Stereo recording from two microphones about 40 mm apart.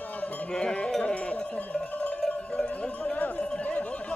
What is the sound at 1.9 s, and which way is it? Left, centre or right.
Music, left.